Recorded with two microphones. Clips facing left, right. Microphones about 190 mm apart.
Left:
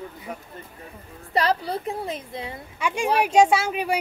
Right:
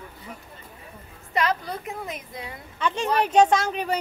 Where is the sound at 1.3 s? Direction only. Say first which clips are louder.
Left 3 dB; 35° left (ahead or behind).